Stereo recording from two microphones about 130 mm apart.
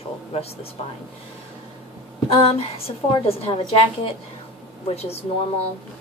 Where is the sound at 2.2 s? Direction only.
50° left (ahead or behind).